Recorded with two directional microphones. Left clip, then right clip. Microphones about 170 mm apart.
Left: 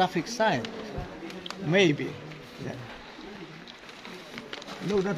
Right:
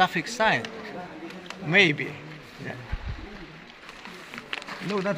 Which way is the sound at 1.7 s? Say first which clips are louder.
Right 3 dB; 25° left (ahead or behind).